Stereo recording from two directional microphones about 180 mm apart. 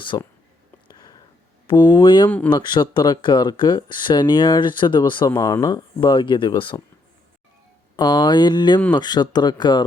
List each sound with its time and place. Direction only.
0.1 s speech: 25° left (ahead or behind)
0.9 s a sound: 20° left (ahead or behind)
1.6 s speech: 25° left (ahead or behind)
7.9 s speech: 25° left (ahead or behind)